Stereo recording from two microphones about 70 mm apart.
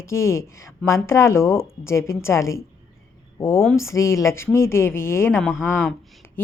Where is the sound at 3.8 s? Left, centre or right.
Left.